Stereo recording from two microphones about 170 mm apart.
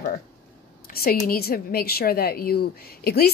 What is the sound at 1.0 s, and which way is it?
A woman's voice, 60° left (ahead or behind).